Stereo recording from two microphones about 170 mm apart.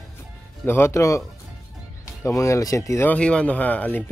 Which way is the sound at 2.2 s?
20° left (ahead or behind).